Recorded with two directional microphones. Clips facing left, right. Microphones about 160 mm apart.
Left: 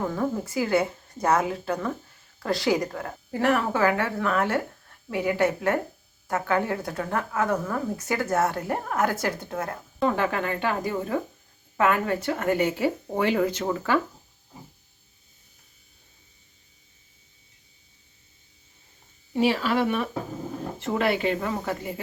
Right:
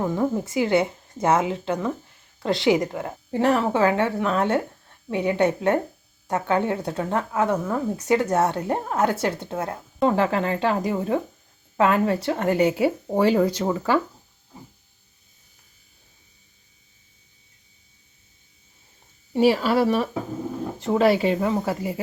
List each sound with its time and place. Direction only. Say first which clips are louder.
0.1 s a woman's voice: right 4 dB; 20° right (ahead or behind)
19.4 s speech: right 4 dB; 40° right (ahead or behind)